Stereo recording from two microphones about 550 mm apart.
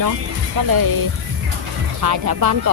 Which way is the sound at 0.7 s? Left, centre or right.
Right.